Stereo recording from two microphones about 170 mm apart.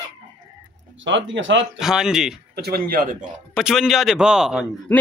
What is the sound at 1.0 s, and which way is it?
Speech, 90° right.